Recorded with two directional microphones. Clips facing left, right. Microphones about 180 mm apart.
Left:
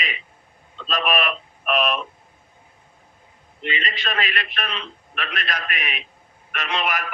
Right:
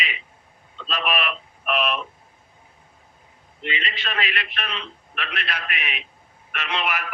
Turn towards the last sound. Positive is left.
turn(degrees=45)  # may be behind; listen again after turning